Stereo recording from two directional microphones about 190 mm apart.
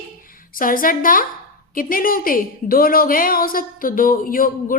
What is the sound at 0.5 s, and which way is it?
A woman's voice, 45° left (ahead or behind).